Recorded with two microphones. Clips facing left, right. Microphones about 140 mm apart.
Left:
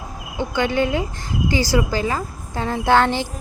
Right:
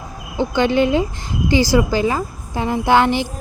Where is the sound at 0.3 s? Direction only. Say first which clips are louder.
Right 4 dB; 25° right (ahead or behind).